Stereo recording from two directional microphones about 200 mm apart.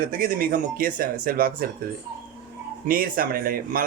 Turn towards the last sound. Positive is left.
turn(degrees=-45)  # may be behind; listen again after turning